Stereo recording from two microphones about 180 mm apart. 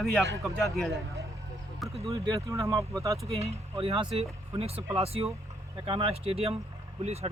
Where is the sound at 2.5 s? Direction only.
15° right (ahead or behind).